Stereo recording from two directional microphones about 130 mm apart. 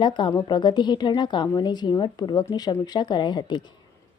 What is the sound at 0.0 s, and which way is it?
Speech, 35° left (ahead or behind).